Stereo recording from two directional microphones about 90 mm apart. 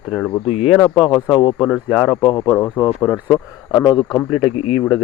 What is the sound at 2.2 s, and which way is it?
Speech, 70° left (ahead or behind).